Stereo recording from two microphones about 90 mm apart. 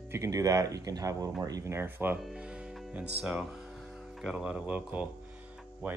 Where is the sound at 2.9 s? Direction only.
10° right (ahead or behind).